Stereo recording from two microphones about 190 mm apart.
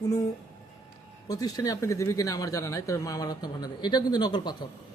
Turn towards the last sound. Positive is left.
turn(degrees=20)  # may be behind; listen again after turning